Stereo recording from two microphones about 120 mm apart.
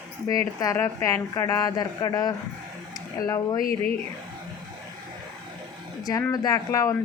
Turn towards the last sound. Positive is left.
turn(degrees=30)  # may be behind; listen again after turning